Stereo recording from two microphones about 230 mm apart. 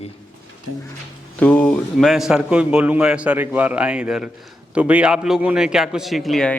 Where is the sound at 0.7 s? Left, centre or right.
Right.